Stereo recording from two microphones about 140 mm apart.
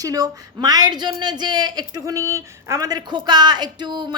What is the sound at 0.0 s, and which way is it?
A woman's voice, 25° right (ahead or behind).